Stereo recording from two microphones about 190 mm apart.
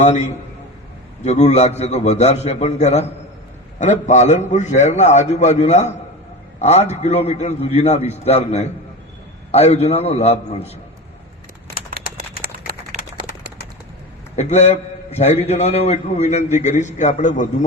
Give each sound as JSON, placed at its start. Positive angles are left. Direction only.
{"t": 0.0, "sound": "a man's voice", "side_deg": 35}
{"t": 14.3, "sound": "a man's voice", "side_deg": 35}